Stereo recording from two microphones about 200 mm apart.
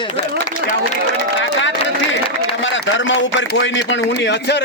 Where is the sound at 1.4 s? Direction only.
65° left (ahead or behind).